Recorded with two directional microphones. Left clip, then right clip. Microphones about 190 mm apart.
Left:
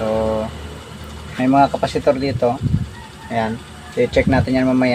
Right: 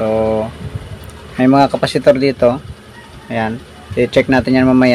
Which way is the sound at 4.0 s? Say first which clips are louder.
Right 4 dB; 40° right (ahead or behind).